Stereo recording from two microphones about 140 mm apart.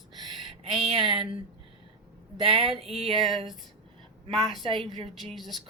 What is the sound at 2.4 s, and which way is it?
Speech, 40° right (ahead or behind).